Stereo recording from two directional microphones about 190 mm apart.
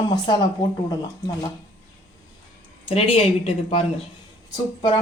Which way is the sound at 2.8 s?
30° left (ahead or behind).